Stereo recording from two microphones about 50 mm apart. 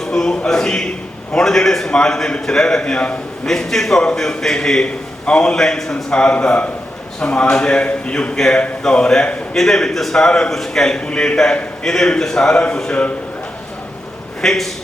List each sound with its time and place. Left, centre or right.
0.1 s a man's voice: centre
14.4 s a man's voice: centre